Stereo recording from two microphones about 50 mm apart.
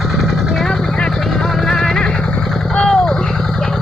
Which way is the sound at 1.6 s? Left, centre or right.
Centre.